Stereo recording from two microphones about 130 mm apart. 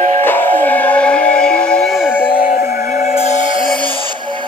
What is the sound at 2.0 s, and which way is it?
Music, 15° left (ahead or behind).